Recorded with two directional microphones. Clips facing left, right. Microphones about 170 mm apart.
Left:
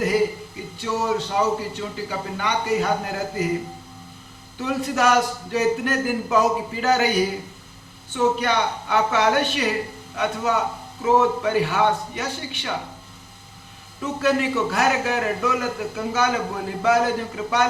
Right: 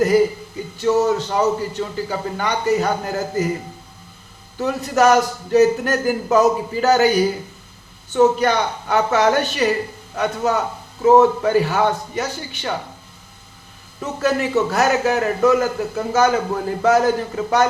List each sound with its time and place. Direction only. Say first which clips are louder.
0.8 s a man's voice: right 7 dB; 40° right (ahead or behind)
4.5 s a man's voice: right 4 dB; 40° right (ahead or behind)
8.1 s a man's voice: right 6 dB; 40° right (ahead or behind)
14.0 s a man's voice: right 1 dB; 40° right (ahead or behind)